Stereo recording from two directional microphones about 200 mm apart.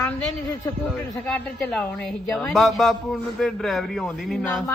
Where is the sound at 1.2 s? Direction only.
5° left (ahead or behind).